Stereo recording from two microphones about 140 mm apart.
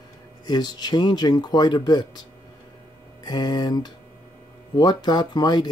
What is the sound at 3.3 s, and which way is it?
Speech, 30° left (ahead or behind).